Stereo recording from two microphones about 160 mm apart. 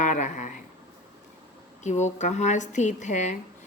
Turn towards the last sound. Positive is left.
turn(degrees=50)  # may be behind; listen again after turning